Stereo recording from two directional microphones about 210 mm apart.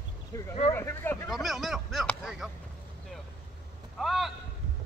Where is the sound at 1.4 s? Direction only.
Centre (ahead or behind).